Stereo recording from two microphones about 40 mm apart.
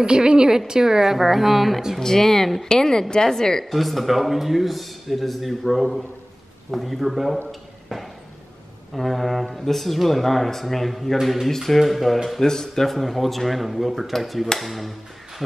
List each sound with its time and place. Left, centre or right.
0.0 s a woman's voice: right
2.0 s a woman's voice: centre
3.7 s speech: centre
8.9 s speech: centre
12.4 s speech: centre
14.6 s a sound: centre